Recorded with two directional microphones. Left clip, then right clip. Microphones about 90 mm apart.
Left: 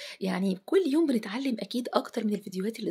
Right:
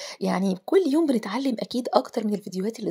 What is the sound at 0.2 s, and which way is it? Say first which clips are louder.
A woman's voice: right 6 dB; 55° right (ahead or behind).